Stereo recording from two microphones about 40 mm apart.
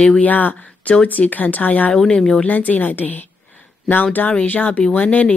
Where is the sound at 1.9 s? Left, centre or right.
Centre.